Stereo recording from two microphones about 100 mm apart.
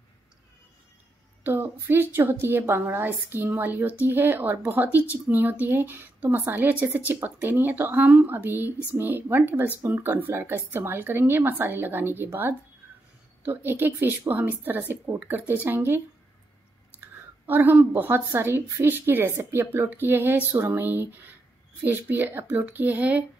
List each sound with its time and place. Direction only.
1.4 s a woman's voice: 20° right (ahead or behind)